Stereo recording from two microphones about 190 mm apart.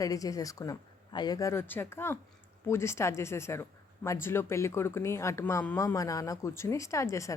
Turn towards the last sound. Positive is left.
turn(degrees=15)  # may be behind; listen again after turning